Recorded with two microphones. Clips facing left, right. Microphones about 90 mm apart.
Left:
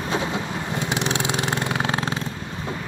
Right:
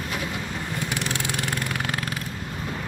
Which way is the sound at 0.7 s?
20° left (ahead or behind).